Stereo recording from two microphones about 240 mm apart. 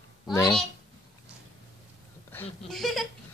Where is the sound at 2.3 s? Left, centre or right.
Centre.